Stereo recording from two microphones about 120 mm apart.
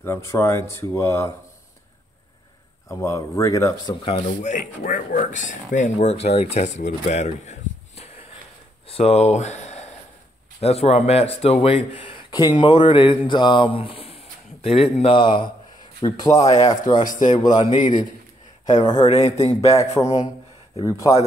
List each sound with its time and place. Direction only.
0.0 s speech: 25° left (ahead or behind)
2.9 s speech: 25° left (ahead or behind)
3.9 s speech: 55° left (ahead or behind)
4.3 s speech: 90° left; by 6.4 s 60° left (ahead or behind)
6.5 s a sound: 65° left (ahead or behind)
8.8 s speech: 55° left (ahead or behind)
16.3 s speech: 65° left (ahead or behind)
16.6 s speech: 35° left (ahead or behind)
17.0 s speech: 90° left
18.9 s speech: 65° left (ahead or behind)
19.7 s speech: 25° left (ahead or behind)